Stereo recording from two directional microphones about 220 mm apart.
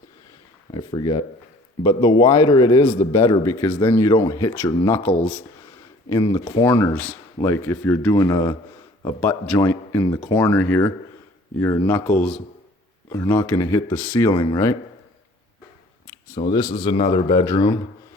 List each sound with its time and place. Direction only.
0.7 s speech: 20° left (ahead or behind)
16.5 s speech: 20° left (ahead or behind)